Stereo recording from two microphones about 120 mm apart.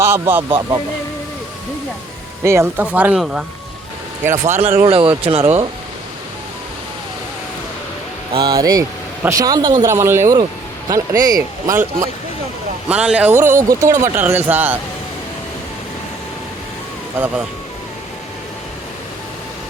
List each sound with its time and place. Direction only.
0.0 s speech: 20° right (ahead or behind)
2.4 s speech: 20° right (ahead or behind)
4.4 s speech: 70° right (ahead or behind)
4.8 s speech: 50° right (ahead or behind)
8.4 s speech: 35° right (ahead or behind)
9.8 s speech: 20° right (ahead or behind)
12.9 s speech: 10° right (ahead or behind)
17.2 s speech: 15° right (ahead or behind)